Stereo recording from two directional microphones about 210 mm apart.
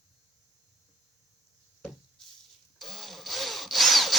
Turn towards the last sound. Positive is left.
turn(degrees=0)  # may be behind; listen again after turning